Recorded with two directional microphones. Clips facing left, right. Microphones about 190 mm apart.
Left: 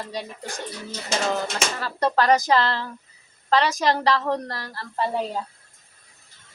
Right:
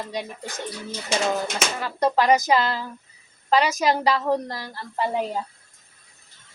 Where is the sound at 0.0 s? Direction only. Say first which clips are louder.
Right 1 dB; 15° right (ahead or behind).